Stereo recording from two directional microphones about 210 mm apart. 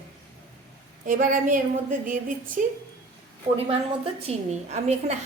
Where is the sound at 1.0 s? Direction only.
40° right (ahead or behind).